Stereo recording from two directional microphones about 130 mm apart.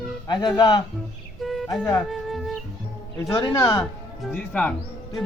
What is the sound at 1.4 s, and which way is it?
Music, centre (ahead or behind).